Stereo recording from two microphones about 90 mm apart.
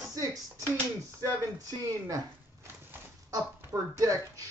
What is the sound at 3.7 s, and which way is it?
Speech, 40° right (ahead or behind).